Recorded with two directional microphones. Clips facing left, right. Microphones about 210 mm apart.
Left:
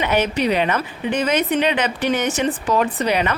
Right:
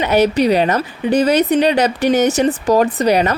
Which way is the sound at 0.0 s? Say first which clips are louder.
Right 6 dB; 40° right (ahead or behind).